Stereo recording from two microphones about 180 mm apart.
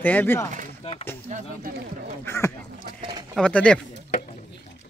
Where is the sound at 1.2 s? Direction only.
40° right (ahead or behind).